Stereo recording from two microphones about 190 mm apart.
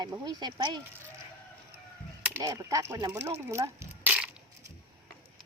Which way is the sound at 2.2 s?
15° right (ahead or behind).